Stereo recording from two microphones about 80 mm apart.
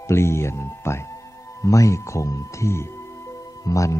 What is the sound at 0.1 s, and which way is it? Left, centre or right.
Speech, left.